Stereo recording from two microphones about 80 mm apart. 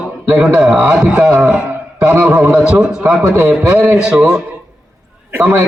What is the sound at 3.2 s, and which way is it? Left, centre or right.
Speech, right.